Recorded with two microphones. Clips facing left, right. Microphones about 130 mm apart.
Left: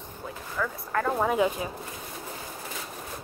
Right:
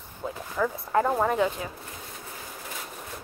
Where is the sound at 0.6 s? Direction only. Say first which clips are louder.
Right 4 dB; 20° right (ahead or behind).